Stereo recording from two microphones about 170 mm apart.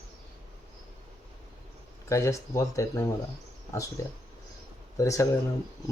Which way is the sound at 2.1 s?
20° left (ahead or behind).